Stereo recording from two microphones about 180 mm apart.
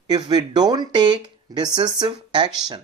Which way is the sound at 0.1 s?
25° right (ahead or behind).